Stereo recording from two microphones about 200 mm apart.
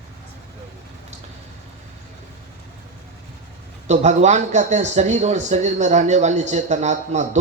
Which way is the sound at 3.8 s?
35° right (ahead or behind).